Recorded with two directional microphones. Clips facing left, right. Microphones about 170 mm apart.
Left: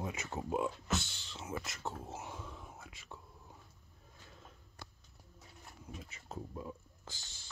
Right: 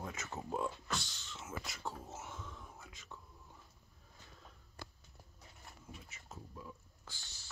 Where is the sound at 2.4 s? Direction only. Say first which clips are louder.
Left 2 dB; 30° left (ahead or behind).